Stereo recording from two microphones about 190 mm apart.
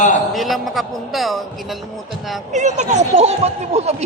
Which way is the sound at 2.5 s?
40° right (ahead or behind).